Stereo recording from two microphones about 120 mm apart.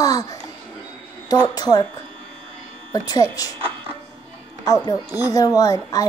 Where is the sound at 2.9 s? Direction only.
30° left (ahead or behind).